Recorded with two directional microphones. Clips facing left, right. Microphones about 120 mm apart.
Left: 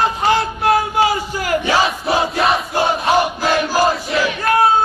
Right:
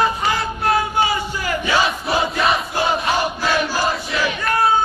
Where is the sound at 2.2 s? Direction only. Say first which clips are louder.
Left 2 dB; centre (ahead or behind).